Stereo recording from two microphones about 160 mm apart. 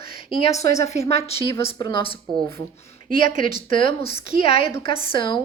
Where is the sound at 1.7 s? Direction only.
25° left (ahead or behind).